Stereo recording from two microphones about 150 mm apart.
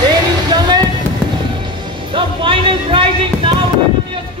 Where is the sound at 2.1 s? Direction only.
35° right (ahead or behind).